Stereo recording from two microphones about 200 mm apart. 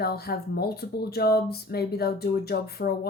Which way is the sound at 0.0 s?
50° left (ahead or behind).